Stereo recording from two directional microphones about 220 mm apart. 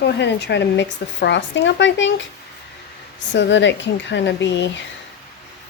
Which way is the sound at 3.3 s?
55° left (ahead or behind).